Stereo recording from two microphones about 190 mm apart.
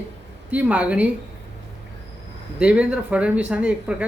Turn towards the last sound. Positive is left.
turn(degrees=-5)  # may be behind; listen again after turning